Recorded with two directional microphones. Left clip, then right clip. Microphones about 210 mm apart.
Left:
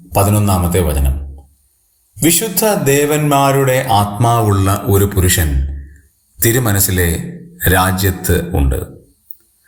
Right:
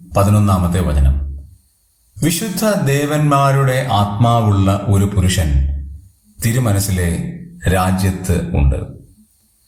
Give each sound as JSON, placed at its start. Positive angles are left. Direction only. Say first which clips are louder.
{"t": 0.1, "sound": "a man's voice", "louder": "left 1 dB", "side_deg": 30}
{"t": 2.1, "sound": "speech", "louder": "left 5 dB", "side_deg": 25}
{"t": 6.4, "sound": "a man's voice", "louder": "left 5 dB", "side_deg": 35}